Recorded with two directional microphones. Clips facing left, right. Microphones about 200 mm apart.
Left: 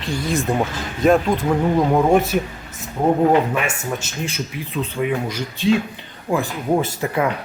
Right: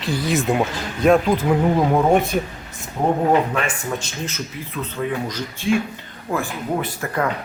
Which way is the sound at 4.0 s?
10° left (ahead or behind).